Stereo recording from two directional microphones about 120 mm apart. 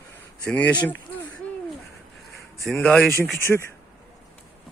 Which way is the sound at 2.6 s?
5° left (ahead or behind).